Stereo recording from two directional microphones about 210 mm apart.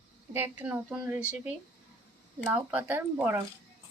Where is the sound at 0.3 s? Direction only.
10° right (ahead or behind).